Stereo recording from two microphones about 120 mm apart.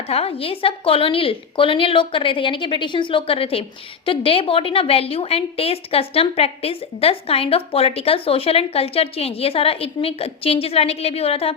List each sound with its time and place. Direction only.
0.1 s a woman's voice: 55° left (ahead or behind)